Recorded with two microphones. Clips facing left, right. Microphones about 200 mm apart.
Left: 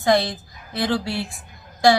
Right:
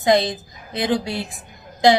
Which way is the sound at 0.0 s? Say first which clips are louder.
Right 2 dB; 20° right (ahead or behind).